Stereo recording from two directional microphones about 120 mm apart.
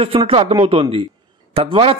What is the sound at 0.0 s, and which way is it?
A man's voice, 55° right (ahead or behind).